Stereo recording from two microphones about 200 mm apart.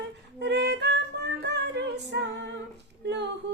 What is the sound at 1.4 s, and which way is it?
Female singing, 60° right (ahead or behind).